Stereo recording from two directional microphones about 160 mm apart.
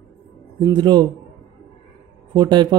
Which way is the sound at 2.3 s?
25° right (ahead or behind).